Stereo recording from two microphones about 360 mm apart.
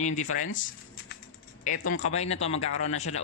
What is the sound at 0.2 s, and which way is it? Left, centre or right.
Speech, left.